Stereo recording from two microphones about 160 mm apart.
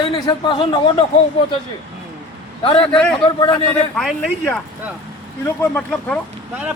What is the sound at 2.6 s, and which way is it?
Speech, 35° left (ahead or behind).